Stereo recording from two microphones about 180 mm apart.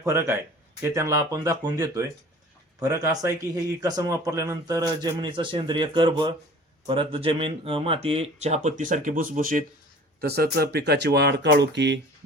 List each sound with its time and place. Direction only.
0.0 s speech: 15° right (ahead or behind); by 9.6 s 50° right (ahead or behind)
10.2 s speech: 60° right (ahead or behind)